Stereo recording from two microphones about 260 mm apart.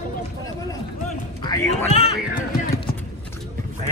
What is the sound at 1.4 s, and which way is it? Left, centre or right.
Speech, centre.